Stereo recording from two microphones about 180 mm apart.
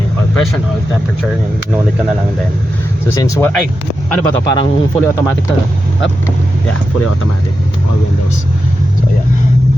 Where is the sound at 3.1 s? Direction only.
15° left (ahead or behind).